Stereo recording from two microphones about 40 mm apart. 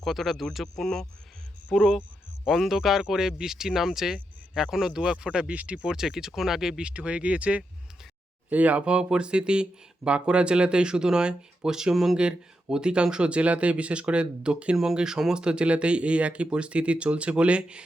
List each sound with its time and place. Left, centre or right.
0.0 s speech: centre
0.6 s speech: centre
1.7 s speech: centre; by 5.9 s right
5.9 s speech: centre
6.8 s speech: right
8.4 s speech: right
8.8 s speech: right